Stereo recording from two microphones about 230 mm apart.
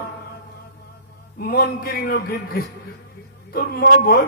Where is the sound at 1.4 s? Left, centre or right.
Left.